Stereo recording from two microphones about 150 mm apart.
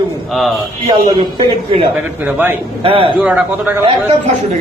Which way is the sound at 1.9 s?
10° right (ahead or behind).